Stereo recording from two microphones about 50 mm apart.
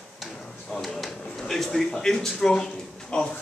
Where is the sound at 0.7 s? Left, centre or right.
Centre.